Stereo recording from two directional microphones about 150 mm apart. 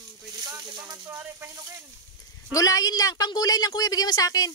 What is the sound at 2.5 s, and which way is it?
Speech, 25° left (ahead or behind).